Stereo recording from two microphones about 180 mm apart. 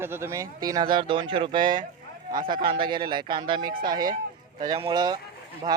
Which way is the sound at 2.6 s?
25° right (ahead or behind).